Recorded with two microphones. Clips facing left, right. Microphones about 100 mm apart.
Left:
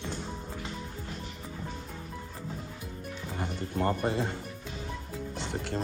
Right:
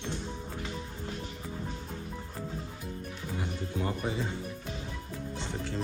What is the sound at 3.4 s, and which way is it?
Music, 55° left (ahead or behind).